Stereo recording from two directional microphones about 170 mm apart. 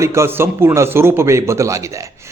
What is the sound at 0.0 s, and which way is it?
A man's voice, 15° right (ahead or behind).